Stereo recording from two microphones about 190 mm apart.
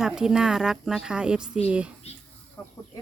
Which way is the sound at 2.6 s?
15° left (ahead or behind).